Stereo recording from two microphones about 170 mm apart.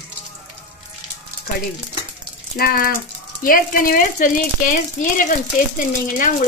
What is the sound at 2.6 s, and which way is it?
Speech, 65° left (ahead or behind).